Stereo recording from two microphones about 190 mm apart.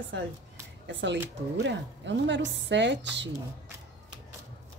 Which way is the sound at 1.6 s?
70° right (ahead or behind).